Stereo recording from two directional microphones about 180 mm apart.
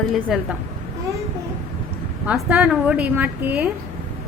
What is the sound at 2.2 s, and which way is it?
A woman's voice, 5° right (ahead or behind).